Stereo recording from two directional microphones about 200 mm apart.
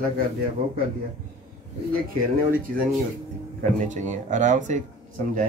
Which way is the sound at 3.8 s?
35° right (ahead or behind).